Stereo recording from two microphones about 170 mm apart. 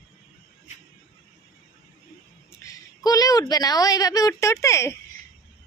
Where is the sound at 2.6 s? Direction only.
20° left (ahead or behind).